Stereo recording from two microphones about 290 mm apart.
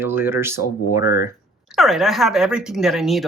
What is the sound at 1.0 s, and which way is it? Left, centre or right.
Speech, left.